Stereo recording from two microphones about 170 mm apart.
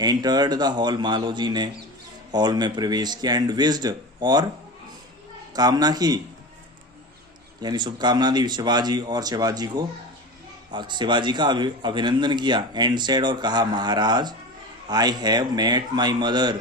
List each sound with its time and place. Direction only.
0.0 s a man's voice: 25° right (ahead or behind)
5.5 s a man's voice: 25° right (ahead or behind)
7.6 s a man's voice: 25° right (ahead or behind)